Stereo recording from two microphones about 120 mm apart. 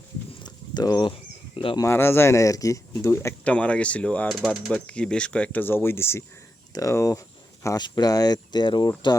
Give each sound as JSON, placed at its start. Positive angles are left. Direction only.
{"t": 0.4, "sound": "a sound", "side_deg": 35}
{"t": 1.7, "sound": "speech", "side_deg": 25}
{"t": 3.4, "sound": "speech", "side_deg": 10}
{"t": 4.3, "sound": "speech", "side_deg": -5}
{"t": 4.7, "sound": "speech", "side_deg": 10}